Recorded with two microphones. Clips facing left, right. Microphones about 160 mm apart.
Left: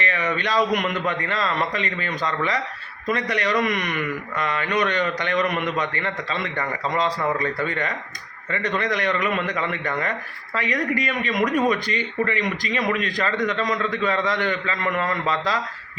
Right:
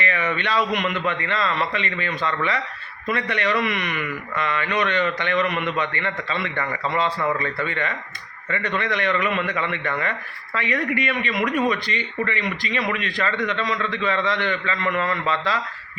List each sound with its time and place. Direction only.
0.0 s a man's voice: 35° left (ahead or behind)